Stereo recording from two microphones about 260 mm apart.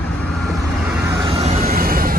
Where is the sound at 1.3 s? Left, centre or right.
Right.